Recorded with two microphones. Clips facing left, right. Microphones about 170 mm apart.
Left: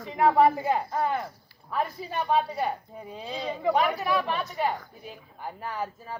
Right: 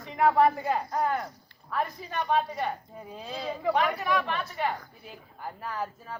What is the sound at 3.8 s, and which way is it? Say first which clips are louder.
Speech: left 1 dB; 10° left (ahead or behind).